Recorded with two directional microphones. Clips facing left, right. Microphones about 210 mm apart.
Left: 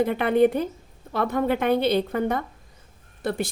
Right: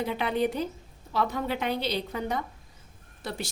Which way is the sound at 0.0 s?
55° left (ahead or behind).